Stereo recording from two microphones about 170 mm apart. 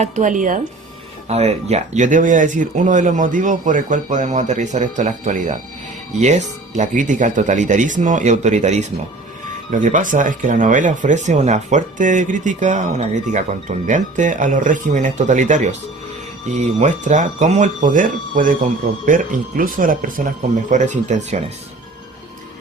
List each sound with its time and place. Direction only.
0.0 s speech: 50° right (ahead or behind)
1.3 s speech: 40° right (ahead or behind)